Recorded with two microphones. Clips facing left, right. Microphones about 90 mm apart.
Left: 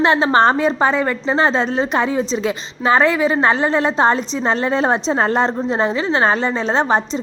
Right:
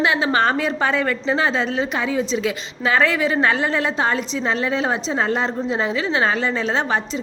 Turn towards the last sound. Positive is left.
turn(degrees=30)  # may be behind; listen again after turning